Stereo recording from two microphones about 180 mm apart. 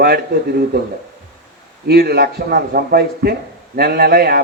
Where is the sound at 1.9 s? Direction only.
60° right (ahead or behind).